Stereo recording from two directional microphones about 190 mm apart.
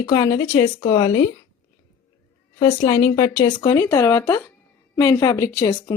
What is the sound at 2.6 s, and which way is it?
Speech, 20° left (ahead or behind).